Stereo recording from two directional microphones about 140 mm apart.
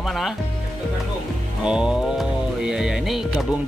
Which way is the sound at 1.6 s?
5° right (ahead or behind).